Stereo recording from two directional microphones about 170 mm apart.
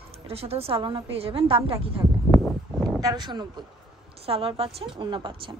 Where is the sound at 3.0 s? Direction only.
25° right (ahead or behind).